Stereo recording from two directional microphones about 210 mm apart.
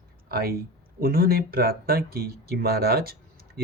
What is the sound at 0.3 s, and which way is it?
Speech, 45° right (ahead or behind).